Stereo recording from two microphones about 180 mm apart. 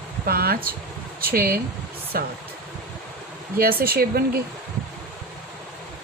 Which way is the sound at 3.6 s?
55° right (ahead or behind).